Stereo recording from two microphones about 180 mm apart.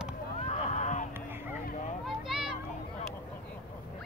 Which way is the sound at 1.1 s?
10° right (ahead or behind).